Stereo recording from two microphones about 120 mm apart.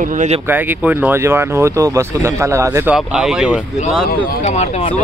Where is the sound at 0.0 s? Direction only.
85° right.